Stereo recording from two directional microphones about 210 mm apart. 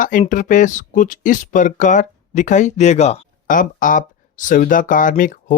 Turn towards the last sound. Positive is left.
turn(degrees=40)  # may be behind; listen again after turning